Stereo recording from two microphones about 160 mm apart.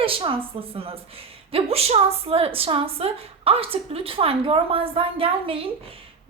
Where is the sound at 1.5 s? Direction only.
40° right (ahead or behind).